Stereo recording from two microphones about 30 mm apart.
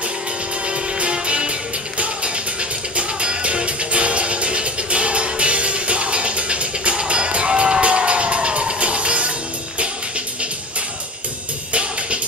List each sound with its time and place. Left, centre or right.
0.7 s music: right
3.0 s music: right